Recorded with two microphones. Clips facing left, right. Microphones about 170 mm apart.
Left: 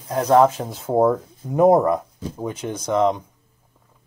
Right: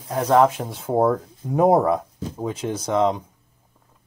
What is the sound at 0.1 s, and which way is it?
Speech, centre (ahead or behind).